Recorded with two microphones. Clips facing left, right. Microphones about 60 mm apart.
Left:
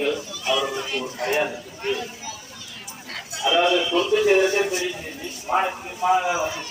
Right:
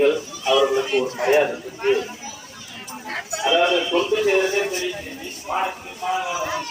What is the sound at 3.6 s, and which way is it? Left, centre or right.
Speech, right.